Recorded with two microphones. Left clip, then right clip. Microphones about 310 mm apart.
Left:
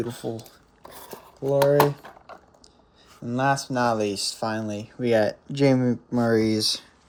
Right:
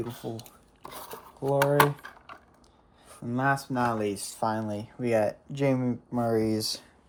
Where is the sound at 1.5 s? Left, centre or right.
Centre.